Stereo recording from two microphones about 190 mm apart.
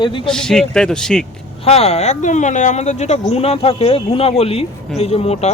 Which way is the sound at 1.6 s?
35° left (ahead or behind).